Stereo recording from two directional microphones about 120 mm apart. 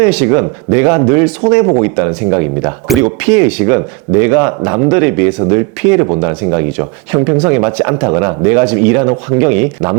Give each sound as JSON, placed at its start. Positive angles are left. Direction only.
{"t": 0.0, "sound": "speech", "side_deg": -20}